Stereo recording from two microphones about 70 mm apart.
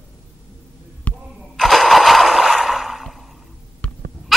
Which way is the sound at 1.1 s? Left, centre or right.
Centre.